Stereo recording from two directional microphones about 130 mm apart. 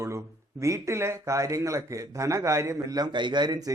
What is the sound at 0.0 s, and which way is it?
Speech, 20° right (ahead or behind).